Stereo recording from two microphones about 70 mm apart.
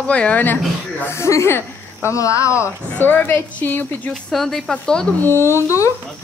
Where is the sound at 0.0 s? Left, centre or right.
Centre.